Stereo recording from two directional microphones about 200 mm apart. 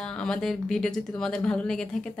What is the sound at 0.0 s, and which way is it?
Speech, 5° left (ahead or behind).